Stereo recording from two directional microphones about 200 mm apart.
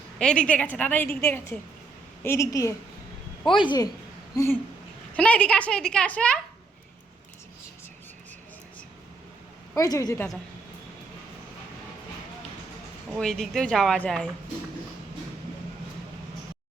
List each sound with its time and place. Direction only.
0.2 s a woman's voice: 5° left (ahead or behind); by 3.8 s 25° left (ahead or behind)
4.4 s a woman's voice: 10° left (ahead or behind)
9.7 s a woman's voice: 15° left (ahead or behind)
13.1 s speech: centre (ahead or behind)